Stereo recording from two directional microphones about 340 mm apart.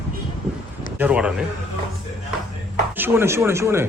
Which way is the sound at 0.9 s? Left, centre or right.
Centre.